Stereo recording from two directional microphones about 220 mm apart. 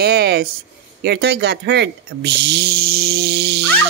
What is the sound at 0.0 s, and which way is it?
A woman's voice, 45° right (ahead or behind).